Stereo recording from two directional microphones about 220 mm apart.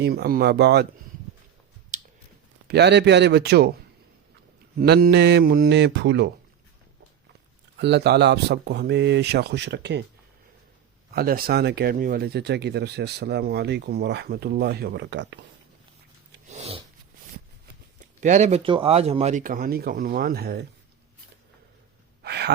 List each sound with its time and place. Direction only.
0.0 s speech: 45° right (ahead or behind)
1.9 s a sound: 35° right (ahead or behind)
2.6 s speech: 50° right (ahead or behind)
4.8 s speech: 45° right (ahead or behind)
7.8 s speech: 50° right (ahead or behind)
11.1 s speech: 45° right (ahead or behind)
16.5 s a sound: 30° right (ahead or behind)
18.2 s speech: 35° right (ahead or behind)
22.2 s a sound: 50° right (ahead or behind)